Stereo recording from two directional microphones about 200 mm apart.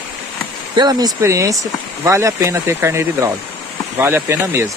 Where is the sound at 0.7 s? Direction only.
20° right (ahead or behind).